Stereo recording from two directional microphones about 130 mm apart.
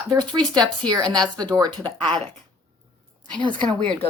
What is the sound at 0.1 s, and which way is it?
A woman's voice, 30° right (ahead or behind).